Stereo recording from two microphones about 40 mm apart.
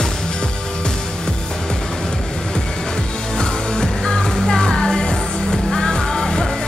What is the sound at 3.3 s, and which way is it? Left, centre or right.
Music, centre.